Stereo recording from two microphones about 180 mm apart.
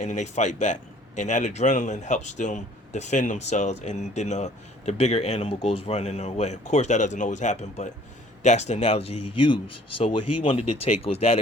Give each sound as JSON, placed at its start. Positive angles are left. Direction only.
{"t": 0.0, "sound": "a man's voice", "side_deg": 40}